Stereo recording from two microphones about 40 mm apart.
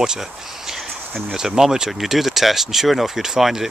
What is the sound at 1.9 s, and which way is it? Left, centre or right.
Speech, centre.